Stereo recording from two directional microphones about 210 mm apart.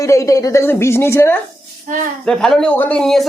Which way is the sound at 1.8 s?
35° right (ahead or behind).